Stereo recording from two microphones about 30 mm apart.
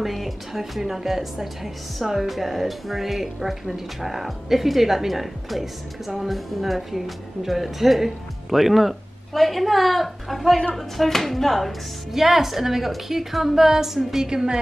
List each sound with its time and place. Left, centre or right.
0.0 s a woman's voice: centre
12.1 s a woman's voice: centre
14.2 s a woman's voice: right